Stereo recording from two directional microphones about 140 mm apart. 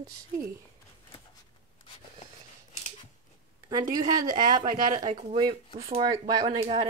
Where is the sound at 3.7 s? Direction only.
25° right (ahead or behind).